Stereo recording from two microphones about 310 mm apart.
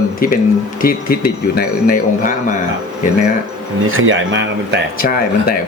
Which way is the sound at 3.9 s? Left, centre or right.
Right.